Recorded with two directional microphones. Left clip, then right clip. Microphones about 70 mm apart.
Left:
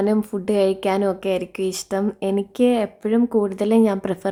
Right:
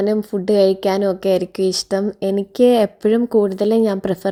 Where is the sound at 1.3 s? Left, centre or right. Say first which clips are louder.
Right 6 dB; right.